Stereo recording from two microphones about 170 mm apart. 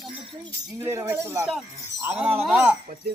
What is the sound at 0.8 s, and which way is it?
Speech, 15° right (ahead or behind).